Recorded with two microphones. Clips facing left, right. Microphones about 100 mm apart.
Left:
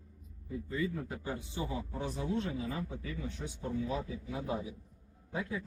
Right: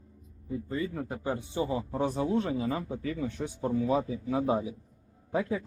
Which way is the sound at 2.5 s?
85° right.